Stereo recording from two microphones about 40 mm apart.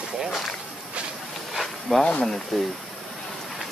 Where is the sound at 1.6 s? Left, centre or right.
Centre.